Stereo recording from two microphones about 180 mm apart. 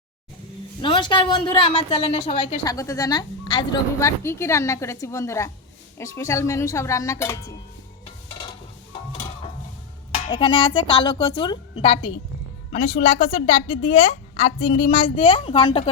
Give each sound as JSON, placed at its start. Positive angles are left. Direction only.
{"t": 0.8, "sound": "speech", "side_deg": 25}
{"t": 2.6, "sound": "a woman's voice", "side_deg": 20}
{"t": 10.2, "sound": "a woman's voice", "side_deg": 30}